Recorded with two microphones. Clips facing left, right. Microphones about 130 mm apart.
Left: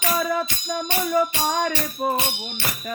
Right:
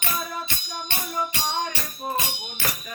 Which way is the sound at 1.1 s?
90° left.